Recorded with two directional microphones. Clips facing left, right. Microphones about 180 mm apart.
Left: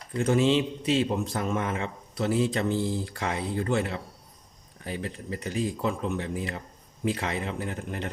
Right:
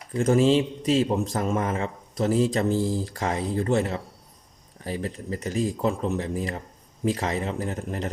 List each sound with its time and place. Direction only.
0.2 s a man's voice: 40° right (ahead or behind)